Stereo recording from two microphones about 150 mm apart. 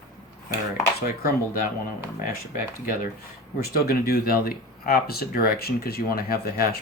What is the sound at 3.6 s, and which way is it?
Speech, 90° left.